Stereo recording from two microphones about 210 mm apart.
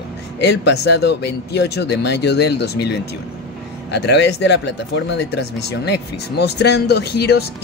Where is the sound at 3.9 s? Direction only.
55° left (ahead or behind).